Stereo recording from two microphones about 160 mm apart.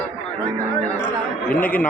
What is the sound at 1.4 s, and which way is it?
Speech, 10° left (ahead or behind).